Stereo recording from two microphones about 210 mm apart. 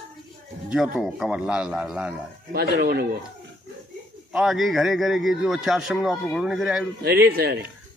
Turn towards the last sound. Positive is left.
turn(degrees=-50)  # may be behind; listen again after turning